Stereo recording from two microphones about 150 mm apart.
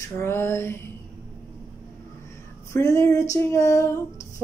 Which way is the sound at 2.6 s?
20° left (ahead or behind).